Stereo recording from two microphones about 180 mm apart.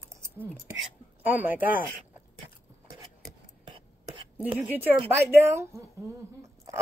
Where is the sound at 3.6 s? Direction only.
25° right (ahead or behind).